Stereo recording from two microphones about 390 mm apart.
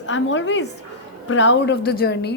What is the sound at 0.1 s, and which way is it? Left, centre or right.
A woman's voice, left.